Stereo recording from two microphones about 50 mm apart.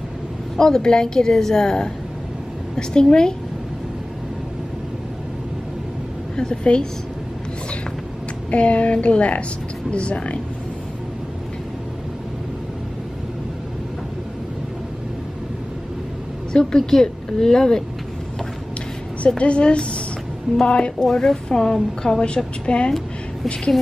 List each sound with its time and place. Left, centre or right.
0.6 s a woman's voice: centre
6.3 s a woman's voice: centre
8.5 s a woman's voice: left
16.5 s a woman's voice: centre
19.2 s a woman's voice: left
21.0 s a woman's voice: centre